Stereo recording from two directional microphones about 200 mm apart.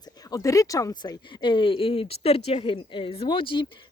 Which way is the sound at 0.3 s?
15° left (ahead or behind).